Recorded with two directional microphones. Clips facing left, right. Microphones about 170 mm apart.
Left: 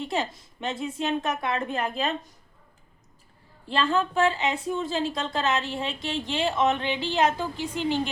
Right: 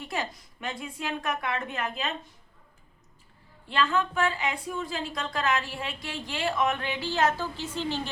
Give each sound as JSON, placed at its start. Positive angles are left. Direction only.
{"t": 0.0, "sound": "a woman's voice", "side_deg": 25}
{"t": 3.7, "sound": "a woman's voice", "side_deg": 30}